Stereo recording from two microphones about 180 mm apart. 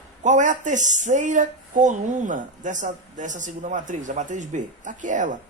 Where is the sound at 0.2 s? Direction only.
45° right (ahead or behind).